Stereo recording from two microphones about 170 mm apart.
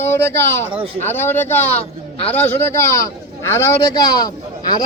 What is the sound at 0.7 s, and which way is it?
Speech, 30° right (ahead or behind).